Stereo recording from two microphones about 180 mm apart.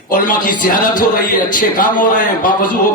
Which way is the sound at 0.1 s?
50° left (ahead or behind).